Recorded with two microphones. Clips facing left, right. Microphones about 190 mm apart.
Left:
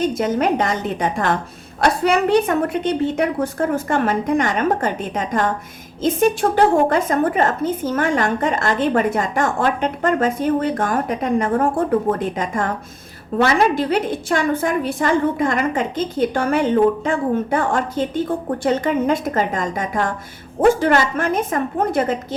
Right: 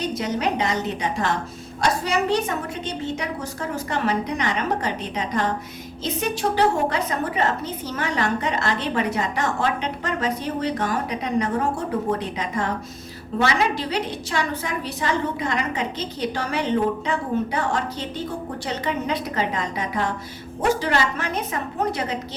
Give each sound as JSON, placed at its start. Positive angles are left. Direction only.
{"t": 0.0, "sound": "a woman's voice", "side_deg": 50}